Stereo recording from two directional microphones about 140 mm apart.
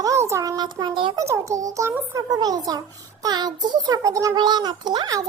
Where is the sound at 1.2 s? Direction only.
20° right (ahead or behind).